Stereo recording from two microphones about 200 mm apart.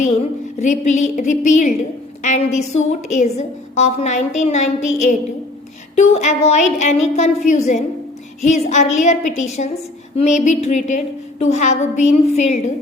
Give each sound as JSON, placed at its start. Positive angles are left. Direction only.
{"t": 0.6, "sound": "a woman's voice", "side_deg": 35}